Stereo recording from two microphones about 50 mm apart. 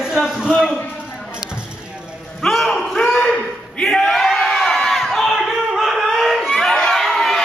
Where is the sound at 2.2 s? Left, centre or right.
Centre.